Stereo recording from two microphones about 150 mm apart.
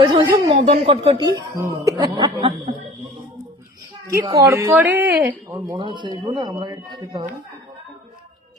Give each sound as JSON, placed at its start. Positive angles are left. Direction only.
{"t": 0.0, "sound": "speech", "side_deg": -30}
{"t": 1.2, "sound": "speech", "side_deg": -25}
{"t": 4.2, "sound": "speech", "side_deg": -20}
{"t": 5.5, "sound": "speech", "side_deg": -25}